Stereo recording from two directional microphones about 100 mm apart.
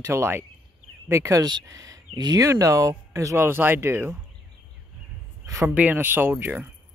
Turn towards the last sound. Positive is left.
turn(degrees=-20)  # may be behind; listen again after turning